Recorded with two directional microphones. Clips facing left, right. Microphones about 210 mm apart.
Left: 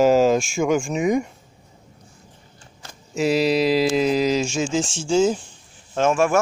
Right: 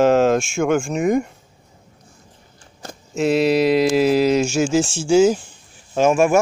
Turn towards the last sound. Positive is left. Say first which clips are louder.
# right 3 dB
turn(degrees=-15)  # may be behind; listen again after turning